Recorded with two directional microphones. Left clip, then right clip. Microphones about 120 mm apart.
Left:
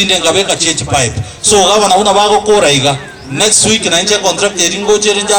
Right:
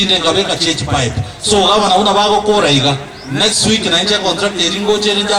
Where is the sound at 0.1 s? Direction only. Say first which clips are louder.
Left 2 dB; 25° left (ahead or behind).